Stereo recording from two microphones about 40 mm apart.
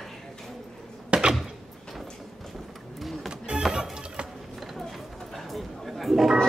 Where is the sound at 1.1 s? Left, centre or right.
Right.